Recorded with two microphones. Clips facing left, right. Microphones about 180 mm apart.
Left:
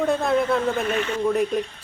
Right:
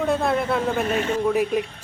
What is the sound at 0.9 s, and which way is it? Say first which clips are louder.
Speech: right 2 dB; 40° right (ahead or behind).